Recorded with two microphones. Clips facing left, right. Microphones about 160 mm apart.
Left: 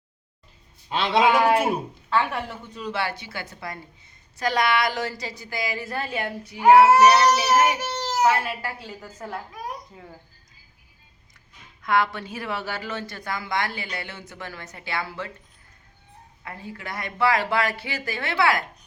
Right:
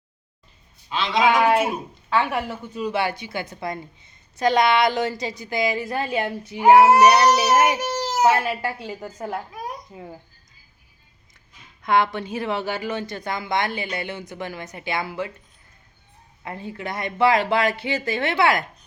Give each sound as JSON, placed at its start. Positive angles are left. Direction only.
{"t": 0.9, "sound": "a man's voice", "side_deg": 60}
{"t": 2.0, "sound": "a woman's voice", "side_deg": -5}
{"t": 8.2, "sound": "a woman's voice", "side_deg": -25}
{"t": 11.8, "sound": "a woman's voice", "side_deg": -20}
{"t": 16.4, "sound": "a woman's voice", "side_deg": -25}